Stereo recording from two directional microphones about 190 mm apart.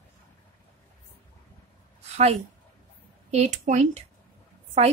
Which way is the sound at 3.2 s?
35° right (ahead or behind).